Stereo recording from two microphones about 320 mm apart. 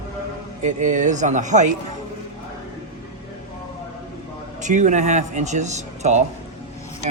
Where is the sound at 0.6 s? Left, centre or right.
Right.